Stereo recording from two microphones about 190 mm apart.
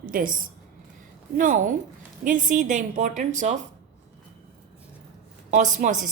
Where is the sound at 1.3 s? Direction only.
45° right (ahead or behind).